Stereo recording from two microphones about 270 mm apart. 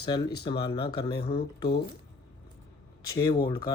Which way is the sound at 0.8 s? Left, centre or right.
Left.